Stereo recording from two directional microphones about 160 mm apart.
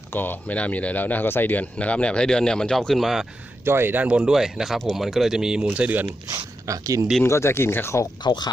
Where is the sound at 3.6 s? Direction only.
15° right (ahead or behind).